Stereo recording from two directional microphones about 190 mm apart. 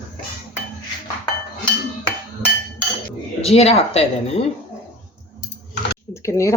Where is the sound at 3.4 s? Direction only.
30° left (ahead or behind).